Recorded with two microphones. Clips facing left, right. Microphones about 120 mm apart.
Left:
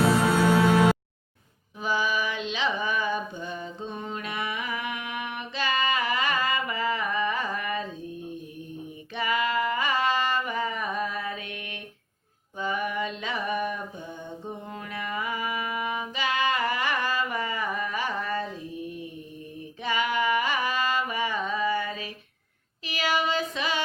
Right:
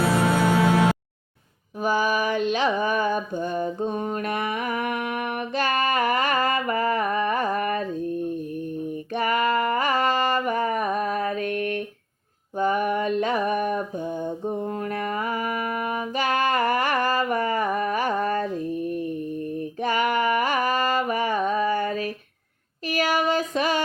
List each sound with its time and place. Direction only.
1.8 s mantra: 50° right (ahead or behind)
9.1 s a sound: 45° right (ahead or behind)
19.5 s music: 50° right (ahead or behind)
22.9 s child singing: 45° right (ahead or behind)